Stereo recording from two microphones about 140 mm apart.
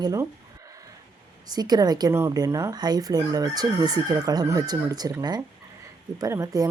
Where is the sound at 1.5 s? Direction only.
30° right (ahead or behind).